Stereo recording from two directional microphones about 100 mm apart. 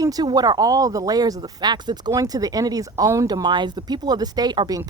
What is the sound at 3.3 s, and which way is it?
Speech, 45° right (ahead or behind).